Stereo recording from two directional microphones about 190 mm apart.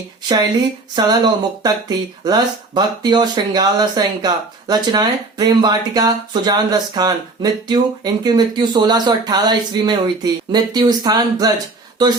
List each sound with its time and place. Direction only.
0.9 s speech: 20° right (ahead or behind)